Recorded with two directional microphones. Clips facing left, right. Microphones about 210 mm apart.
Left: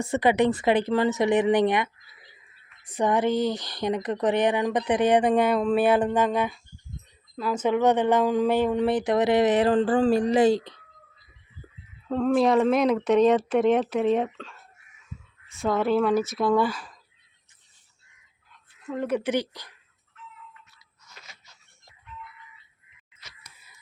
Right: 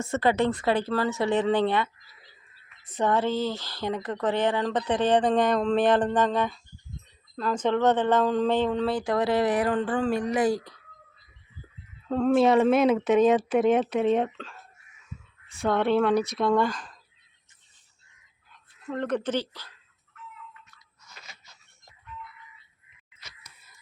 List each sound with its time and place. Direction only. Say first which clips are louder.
0.0 s speech: left 2 dB; 15° left (ahead or behind)
12.0 s speech: right 1 dB; centre (ahead or behind)
15.5 s speech: even; centre (ahead or behind)
18.5 s speech: left 1 dB; 5° left (ahead or behind)